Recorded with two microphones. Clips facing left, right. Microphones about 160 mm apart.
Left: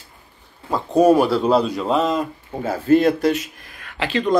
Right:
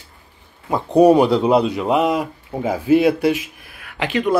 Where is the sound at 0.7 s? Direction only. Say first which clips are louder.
Right 2 dB; 15° right (ahead or behind).